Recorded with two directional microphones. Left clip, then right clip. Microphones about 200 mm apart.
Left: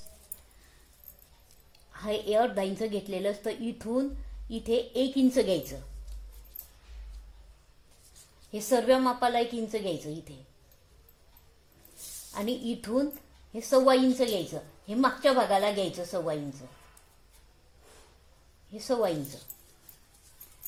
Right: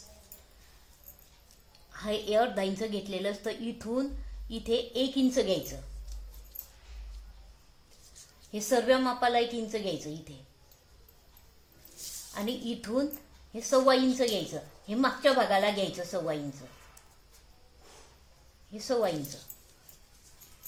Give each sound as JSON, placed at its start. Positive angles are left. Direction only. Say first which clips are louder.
{"t": 1.9, "sound": "a woman's voice", "louder": "left 1 dB", "side_deg": 30}
{"t": 8.5, "sound": "a woman's voice", "louder": "left 1 dB", "side_deg": 25}
{"t": 12.3, "sound": "a woman's voice", "louder": "left 3 dB", "side_deg": 30}
{"t": 18.7, "sound": "a woman's voice", "louder": "left 1 dB", "side_deg": 25}